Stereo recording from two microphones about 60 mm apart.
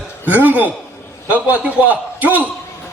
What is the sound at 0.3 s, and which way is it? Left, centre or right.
A man's voice, right.